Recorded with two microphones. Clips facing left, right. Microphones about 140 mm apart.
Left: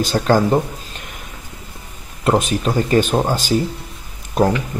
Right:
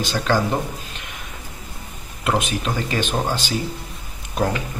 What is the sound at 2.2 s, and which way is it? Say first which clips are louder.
Speech: left 5 dB; 40° left (ahead or behind).